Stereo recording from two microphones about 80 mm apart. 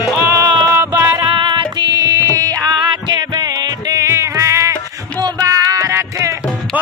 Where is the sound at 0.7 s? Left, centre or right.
Right.